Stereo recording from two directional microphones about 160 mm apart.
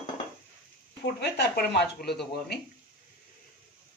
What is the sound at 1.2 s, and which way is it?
Speech, 80° left.